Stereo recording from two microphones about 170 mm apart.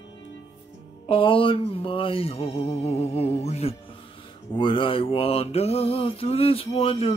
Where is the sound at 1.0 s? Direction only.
30° left (ahead or behind).